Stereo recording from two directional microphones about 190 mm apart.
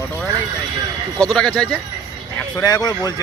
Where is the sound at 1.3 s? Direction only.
5° left (ahead or behind).